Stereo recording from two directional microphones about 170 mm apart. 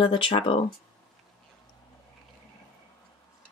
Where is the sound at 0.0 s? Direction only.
30° left (ahead or behind).